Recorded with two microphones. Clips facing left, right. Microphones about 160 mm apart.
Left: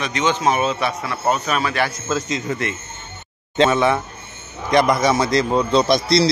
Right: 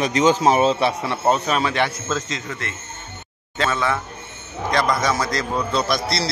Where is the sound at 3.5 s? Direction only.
25° left (ahead or behind).